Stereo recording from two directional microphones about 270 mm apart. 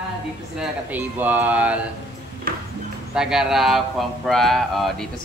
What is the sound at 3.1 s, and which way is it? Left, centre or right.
Speech, centre.